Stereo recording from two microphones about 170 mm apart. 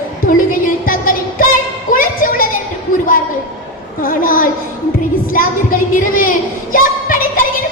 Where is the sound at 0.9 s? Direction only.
55° left (ahead or behind).